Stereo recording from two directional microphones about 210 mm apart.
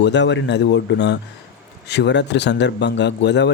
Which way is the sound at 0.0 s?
55° left (ahead or behind).